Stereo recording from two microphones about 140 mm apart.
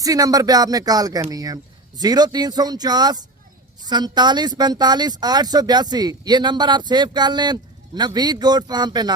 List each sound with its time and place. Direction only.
0.0 s speech: 25° right (ahead or behind)